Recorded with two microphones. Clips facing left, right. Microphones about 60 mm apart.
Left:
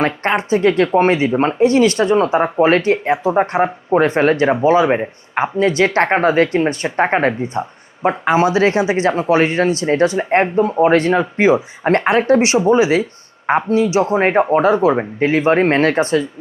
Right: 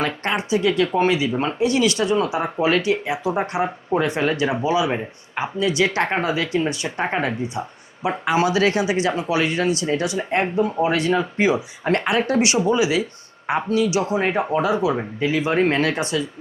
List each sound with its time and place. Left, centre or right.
0.0 s speech: left